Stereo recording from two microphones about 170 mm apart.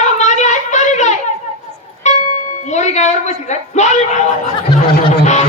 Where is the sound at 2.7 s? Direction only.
45° left (ahead or behind).